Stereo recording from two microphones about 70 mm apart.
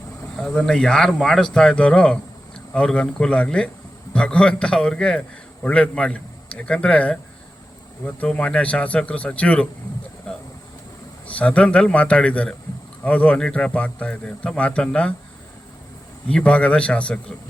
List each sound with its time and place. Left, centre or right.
0.3 s speech: centre
10.3 s a sound: centre
11.3 s speech: centre
16.3 s speech: centre